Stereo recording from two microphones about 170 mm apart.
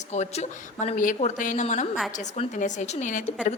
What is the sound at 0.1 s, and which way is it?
A woman's voice, 40° left (ahead or behind).